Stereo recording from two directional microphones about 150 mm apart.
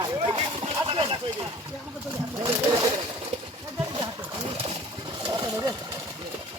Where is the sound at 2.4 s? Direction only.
25° right (ahead or behind).